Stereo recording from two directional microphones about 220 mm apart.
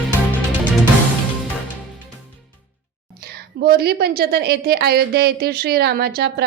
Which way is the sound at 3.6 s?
45° right (ahead or behind).